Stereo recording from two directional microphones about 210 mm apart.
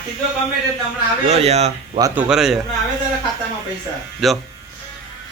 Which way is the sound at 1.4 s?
30° right (ahead or behind).